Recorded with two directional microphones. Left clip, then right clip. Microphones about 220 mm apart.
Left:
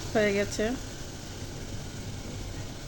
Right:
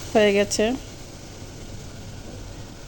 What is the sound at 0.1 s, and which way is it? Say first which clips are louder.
Speech: right 8 dB; 35° right (ahead or behind).